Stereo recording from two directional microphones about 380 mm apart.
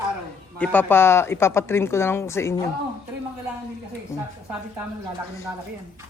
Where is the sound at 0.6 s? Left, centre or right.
Centre.